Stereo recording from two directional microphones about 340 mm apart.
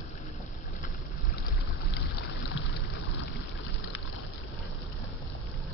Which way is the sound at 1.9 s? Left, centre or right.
Left.